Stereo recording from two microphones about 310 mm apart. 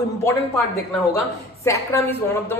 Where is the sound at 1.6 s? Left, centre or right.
Centre.